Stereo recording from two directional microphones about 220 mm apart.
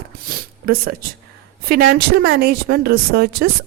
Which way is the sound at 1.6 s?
45° right (ahead or behind).